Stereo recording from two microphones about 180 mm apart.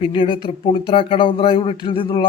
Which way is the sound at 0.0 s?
30° left (ahead or behind).